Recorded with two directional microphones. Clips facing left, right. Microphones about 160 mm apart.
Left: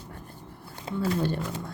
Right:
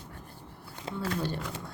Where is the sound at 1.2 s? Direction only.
55° left (ahead or behind).